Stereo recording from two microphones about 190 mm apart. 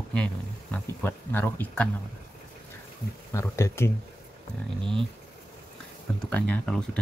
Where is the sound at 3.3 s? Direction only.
15° left (ahead or behind).